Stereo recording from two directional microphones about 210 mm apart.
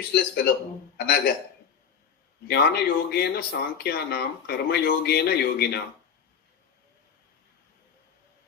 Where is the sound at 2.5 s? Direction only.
50° left (ahead or behind).